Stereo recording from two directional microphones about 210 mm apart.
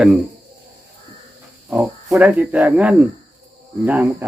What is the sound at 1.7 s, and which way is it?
Speech, 10° right (ahead or behind).